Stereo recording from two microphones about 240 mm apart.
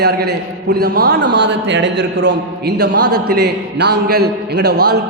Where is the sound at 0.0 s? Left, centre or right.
Right.